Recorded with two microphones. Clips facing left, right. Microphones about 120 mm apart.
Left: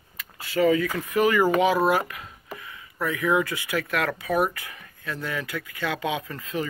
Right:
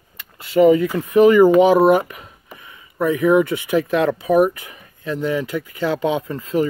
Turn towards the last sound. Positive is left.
turn(degrees=-30)  # may be behind; listen again after turning